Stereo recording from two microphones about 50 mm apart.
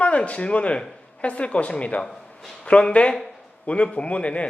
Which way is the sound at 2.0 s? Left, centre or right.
Centre.